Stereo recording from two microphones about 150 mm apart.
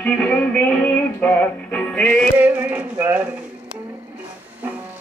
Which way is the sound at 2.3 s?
10° right (ahead or behind).